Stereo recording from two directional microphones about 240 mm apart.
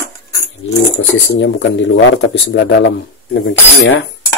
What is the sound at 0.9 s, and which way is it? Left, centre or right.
Speech, left.